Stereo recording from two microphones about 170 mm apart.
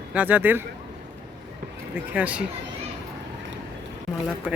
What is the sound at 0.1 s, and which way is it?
Speech, 10° right (ahead or behind).